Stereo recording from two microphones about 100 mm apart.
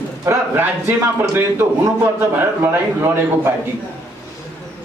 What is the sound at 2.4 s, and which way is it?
A man's voice, 25° right (ahead or behind).